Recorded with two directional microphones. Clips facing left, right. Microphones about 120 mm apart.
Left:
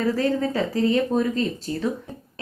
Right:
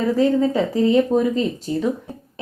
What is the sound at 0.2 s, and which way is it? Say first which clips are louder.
A woman's voice: right 5 dB; 15° right (ahead or behind).